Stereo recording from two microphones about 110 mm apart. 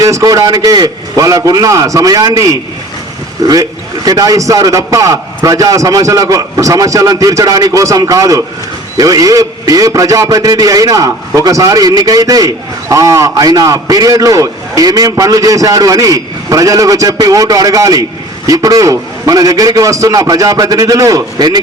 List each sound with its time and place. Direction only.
0.0 s a man's voice: 30° right (ahead or behind)